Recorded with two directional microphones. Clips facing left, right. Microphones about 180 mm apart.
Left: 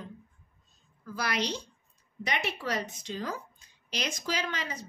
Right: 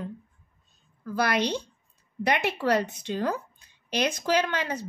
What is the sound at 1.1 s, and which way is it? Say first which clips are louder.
A woman's voice: right 7 dB; 55° right (ahead or behind).